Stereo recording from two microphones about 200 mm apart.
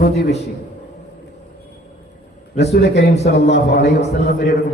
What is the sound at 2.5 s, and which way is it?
A man's voice, 55° left (ahead or behind).